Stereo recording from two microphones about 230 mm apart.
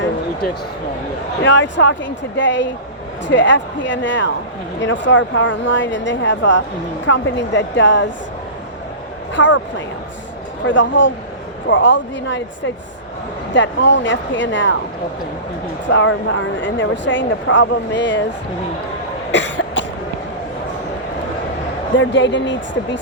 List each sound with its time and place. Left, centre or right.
1.4 s speech: left
9.3 s speech: left
15.9 s speech: left
19.3 s cough: left
21.9 s speech: left